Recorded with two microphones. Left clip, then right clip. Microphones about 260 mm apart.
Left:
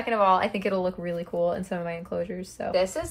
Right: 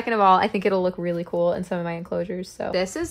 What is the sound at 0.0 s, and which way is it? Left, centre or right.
Speech, right.